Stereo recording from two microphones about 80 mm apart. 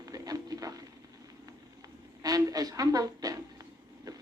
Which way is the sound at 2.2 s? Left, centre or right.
Right.